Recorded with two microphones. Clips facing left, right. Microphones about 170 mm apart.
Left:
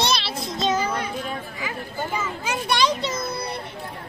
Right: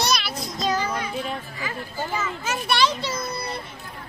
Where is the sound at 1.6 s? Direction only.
10° left (ahead or behind).